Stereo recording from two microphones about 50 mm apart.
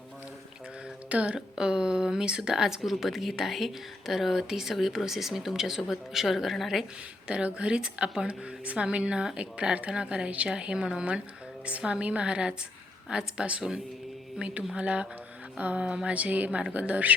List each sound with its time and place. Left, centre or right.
1.1 s a woman's voice: right; by 6.8 s centre
7.3 s a woman's voice: right
14.8 s a woman's voice: right